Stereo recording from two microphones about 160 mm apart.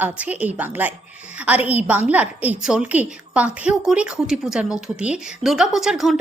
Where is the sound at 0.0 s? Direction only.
10° right (ahead or behind).